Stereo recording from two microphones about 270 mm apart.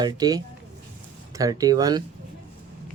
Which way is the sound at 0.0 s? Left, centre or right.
Centre.